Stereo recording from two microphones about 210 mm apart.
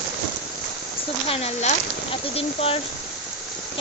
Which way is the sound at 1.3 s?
30° left (ahead or behind).